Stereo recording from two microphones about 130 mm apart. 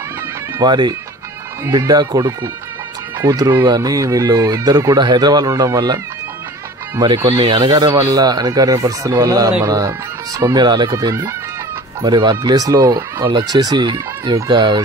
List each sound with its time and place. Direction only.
0.6 s speech: 35° right (ahead or behind)
7.2 s speech: 40° right (ahead or behind)